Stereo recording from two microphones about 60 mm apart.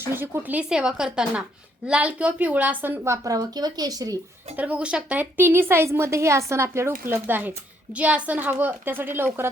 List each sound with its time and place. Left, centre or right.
0.0 s a woman's voice: right
0.7 s a woman's voice: centre; by 3.0 s right
3.2 s speech: right
4.5 s a woman's voice: right
5.2 s a woman's voice: right
7.1 s a woman's voice: right
7.9 s a woman's voice: right